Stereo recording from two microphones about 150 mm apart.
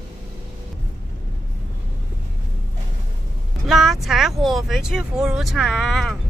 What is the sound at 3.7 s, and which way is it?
Speech, centre (ahead or behind).